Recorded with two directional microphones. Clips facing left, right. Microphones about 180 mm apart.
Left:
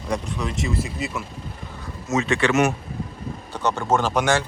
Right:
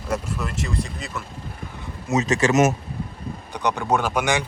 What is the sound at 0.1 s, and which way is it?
Speech, 5° right (ahead or behind).